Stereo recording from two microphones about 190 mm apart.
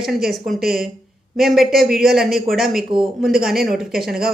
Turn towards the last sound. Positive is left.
turn(degrees=-5)  # may be behind; listen again after turning